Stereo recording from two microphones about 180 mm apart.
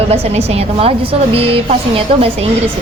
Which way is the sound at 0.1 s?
35° right (ahead or behind).